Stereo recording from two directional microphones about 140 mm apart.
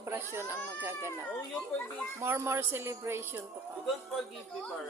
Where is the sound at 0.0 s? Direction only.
20° right (ahead or behind).